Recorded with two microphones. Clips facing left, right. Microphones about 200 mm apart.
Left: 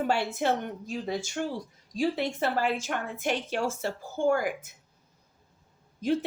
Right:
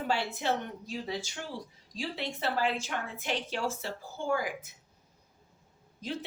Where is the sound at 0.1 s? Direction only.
50° left (ahead or behind).